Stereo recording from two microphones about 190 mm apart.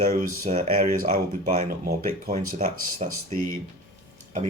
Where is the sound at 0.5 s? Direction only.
40° right (ahead or behind).